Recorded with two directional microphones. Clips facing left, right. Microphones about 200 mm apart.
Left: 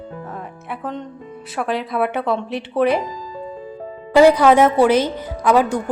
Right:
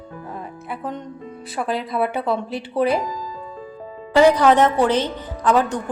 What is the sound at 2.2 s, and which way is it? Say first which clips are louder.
Speech: left 1 dB; 5° right (ahead or behind).